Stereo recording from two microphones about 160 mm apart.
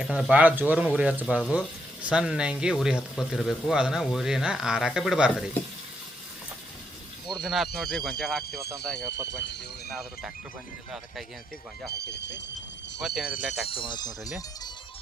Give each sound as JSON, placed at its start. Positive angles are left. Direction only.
{"t": 0.0, "sound": "speech", "side_deg": -5}
{"t": 7.4, "sound": "speech", "side_deg": 0}
{"t": 11.9, "sound": "speech", "side_deg": 90}
{"t": 13.0, "sound": "speech", "side_deg": 0}
{"t": 13.7, "sound": "speech", "side_deg": 30}